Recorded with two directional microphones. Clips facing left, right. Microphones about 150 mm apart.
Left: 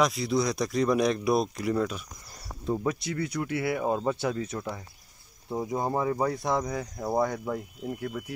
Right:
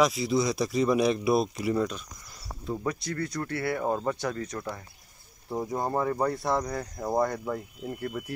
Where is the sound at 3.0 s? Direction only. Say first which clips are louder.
Left 1 dB; 5° left (ahead or behind).